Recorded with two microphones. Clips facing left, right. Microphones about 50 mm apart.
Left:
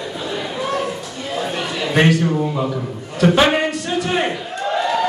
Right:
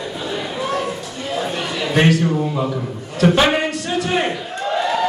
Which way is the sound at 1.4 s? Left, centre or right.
Centre.